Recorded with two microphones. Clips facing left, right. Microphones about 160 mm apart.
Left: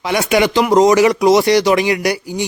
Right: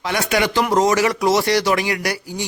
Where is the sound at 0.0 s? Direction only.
15° left (ahead or behind).